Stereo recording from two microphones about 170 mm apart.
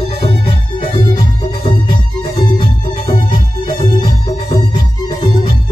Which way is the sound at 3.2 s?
25° left (ahead or behind).